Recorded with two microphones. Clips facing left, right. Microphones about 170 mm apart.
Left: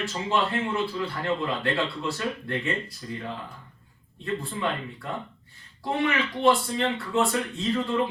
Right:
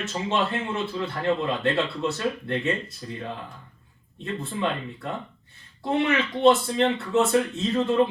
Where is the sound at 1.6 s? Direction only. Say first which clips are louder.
Right 3 dB; 25° right (ahead or behind).